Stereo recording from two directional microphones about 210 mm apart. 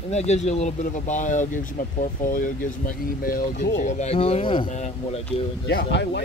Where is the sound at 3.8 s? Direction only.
35° left (ahead or behind).